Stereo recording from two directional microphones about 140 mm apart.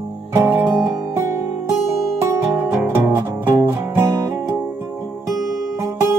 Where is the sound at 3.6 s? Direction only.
20° right (ahead or behind).